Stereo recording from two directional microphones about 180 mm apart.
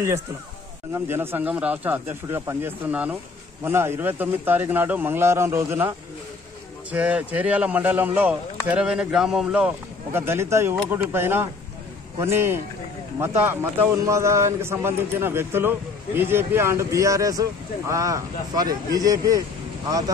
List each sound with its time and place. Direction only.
0.9 s speech: 15° right (ahead or behind)
10.1 s speech: 15° right (ahead or behind)